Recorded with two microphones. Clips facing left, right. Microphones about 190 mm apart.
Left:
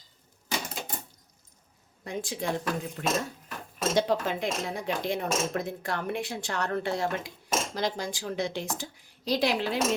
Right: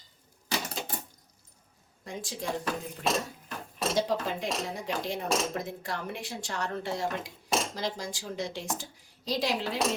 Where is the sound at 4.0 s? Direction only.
65° left (ahead or behind).